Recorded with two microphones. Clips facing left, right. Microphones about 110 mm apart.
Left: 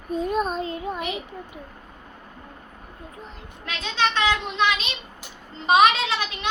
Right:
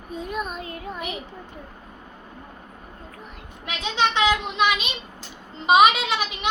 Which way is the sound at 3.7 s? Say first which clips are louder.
Right 1 dB; 15° right (ahead or behind).